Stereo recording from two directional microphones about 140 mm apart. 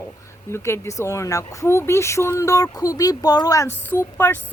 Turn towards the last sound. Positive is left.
turn(degrees=15)  # may be behind; listen again after turning